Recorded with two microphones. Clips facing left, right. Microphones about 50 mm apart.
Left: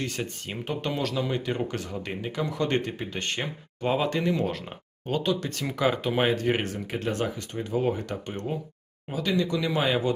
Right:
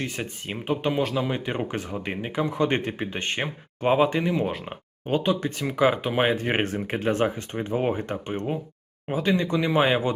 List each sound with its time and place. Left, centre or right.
0.0 s speech: right